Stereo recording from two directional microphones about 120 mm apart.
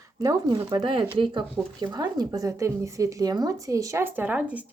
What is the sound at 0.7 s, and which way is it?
Speech, 45° right (ahead or behind).